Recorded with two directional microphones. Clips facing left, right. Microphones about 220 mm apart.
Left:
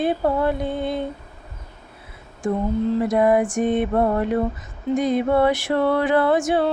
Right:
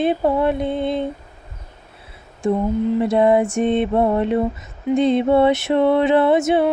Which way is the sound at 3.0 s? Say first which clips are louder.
Right 3 dB; 25° right (ahead or behind).